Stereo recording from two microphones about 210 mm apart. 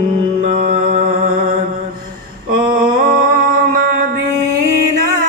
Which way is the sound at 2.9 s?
45° right (ahead or behind).